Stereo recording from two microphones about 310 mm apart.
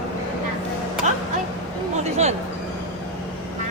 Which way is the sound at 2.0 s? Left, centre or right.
Right.